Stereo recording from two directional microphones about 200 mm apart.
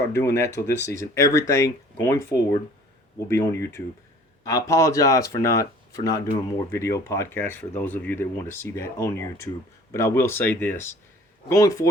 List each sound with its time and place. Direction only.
0.1 s speech: 15° left (ahead or behind)